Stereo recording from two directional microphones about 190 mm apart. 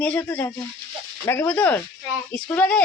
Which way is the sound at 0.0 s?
10° left (ahead or behind).